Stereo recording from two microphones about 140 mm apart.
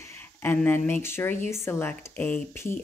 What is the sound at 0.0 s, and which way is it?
Speech, 15° left (ahead or behind).